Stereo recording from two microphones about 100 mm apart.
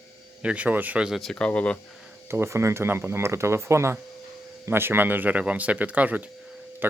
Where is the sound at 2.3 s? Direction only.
25° right (ahead or behind).